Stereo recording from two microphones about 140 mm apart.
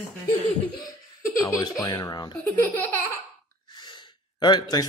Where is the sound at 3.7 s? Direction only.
35° left (ahead or behind).